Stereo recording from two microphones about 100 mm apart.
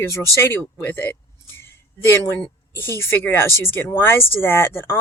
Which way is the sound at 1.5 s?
25° left (ahead or behind).